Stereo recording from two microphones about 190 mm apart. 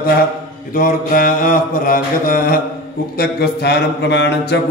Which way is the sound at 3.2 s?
60° left (ahead or behind).